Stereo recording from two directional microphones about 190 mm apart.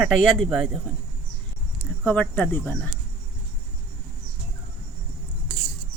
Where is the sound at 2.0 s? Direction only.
10° left (ahead or behind).